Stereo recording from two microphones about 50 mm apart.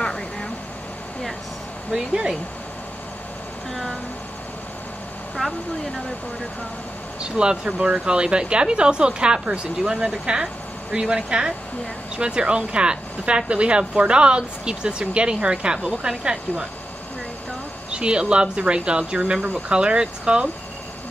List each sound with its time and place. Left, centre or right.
0.0 s vehicle: centre
1.9 s speech: centre
5.4 s speech: centre
7.2 s speech: centre
17.9 s speech: right